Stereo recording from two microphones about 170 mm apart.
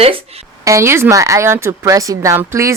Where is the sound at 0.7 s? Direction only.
15° right (ahead or behind).